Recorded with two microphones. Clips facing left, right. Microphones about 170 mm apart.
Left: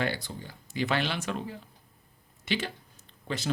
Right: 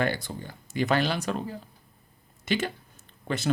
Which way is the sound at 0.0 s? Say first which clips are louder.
Right 3 dB; 50° right (ahead or behind).